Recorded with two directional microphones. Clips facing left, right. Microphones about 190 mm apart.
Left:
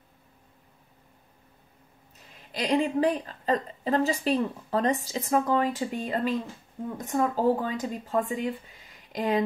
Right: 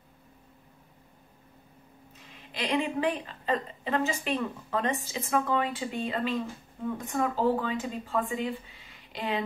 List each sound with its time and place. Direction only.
2.5 s a woman's voice: 40° left (ahead or behind)